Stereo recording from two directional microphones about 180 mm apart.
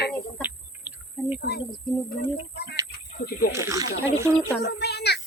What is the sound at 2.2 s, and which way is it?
Speech, 65° left (ahead or behind).